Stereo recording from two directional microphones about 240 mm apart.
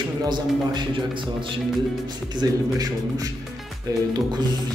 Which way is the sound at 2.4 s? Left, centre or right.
Centre.